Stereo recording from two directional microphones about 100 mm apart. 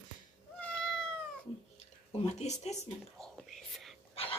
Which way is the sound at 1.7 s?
90° left.